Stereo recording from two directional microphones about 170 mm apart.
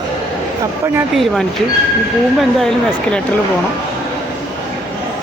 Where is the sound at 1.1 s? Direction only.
Centre (ahead or behind).